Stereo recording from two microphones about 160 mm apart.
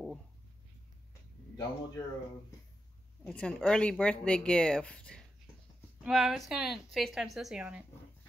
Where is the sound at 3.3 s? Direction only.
5° left (ahead or behind).